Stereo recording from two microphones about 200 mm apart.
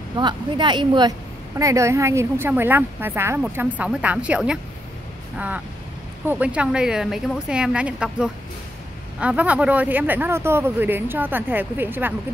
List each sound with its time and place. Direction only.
0.1 s speech: 25° right (ahead or behind); by 4.6 s 5° right (ahead or behind)
6.2 s a woman's voice: 10° right (ahead or behind)